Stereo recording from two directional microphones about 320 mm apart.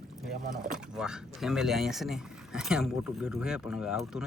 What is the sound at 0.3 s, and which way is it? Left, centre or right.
Speech, right.